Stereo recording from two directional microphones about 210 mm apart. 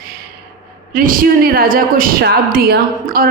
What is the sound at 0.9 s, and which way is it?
A woman's voice, 40° right (ahead or behind).